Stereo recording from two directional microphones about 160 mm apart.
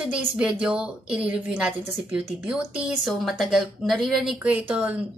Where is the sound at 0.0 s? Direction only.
5° right (ahead or behind).